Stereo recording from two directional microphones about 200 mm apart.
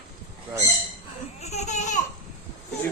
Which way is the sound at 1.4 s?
35° left (ahead or behind).